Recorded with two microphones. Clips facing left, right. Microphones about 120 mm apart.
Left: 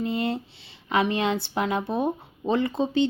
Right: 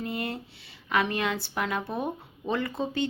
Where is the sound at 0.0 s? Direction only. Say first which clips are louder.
Left 6 dB; 25° left (ahead or behind).